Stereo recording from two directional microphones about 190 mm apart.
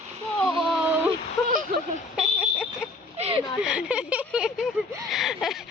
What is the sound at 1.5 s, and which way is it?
Speech, 45° right (ahead or behind).